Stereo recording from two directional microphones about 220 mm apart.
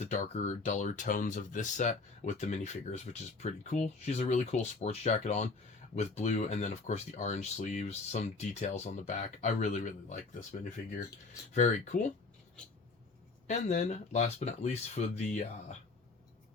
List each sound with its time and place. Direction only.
0.0 s speech: 30° left (ahead or behind)
11.5 s speech: 35° left (ahead or behind)
13.5 s speech: 30° left (ahead or behind)